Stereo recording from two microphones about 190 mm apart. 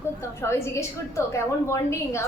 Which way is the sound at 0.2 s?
15° left (ahead or behind).